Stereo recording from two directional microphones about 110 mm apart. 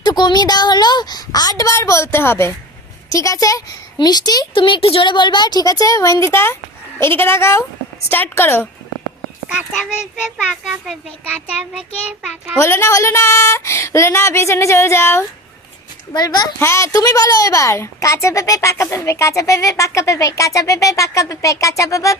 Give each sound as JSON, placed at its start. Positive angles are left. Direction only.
{"t": 0.0, "sound": "a woman's voice", "side_deg": 40}
{"t": 10.2, "sound": "a child's voice", "side_deg": -5}
{"t": 12.5, "sound": "a woman's voice", "side_deg": 25}
{"t": 16.1, "sound": "speech", "side_deg": 40}
{"t": 16.6, "sound": "a woman's voice", "side_deg": 25}